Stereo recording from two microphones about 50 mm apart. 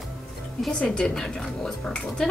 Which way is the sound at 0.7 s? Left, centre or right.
Centre.